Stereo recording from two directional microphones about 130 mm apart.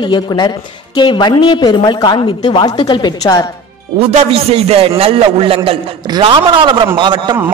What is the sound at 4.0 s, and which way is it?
A man's voice, 55° right (ahead or behind).